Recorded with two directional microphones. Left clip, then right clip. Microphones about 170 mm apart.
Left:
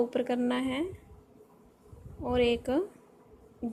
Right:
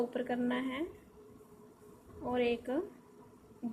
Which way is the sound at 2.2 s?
60° left (ahead or behind).